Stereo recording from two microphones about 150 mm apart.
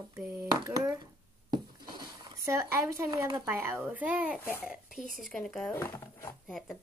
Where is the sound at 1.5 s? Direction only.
30° right (ahead or behind).